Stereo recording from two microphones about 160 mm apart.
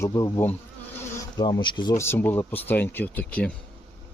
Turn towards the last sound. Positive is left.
turn(degrees=5)  # may be behind; listen again after turning